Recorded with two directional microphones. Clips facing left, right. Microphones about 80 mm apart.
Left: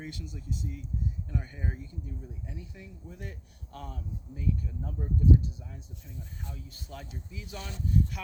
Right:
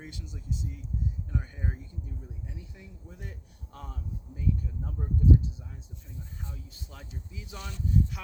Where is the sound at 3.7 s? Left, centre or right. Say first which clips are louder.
Left 1 dB; centre.